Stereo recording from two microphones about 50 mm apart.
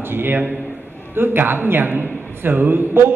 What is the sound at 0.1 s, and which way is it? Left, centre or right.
A man's voice, right.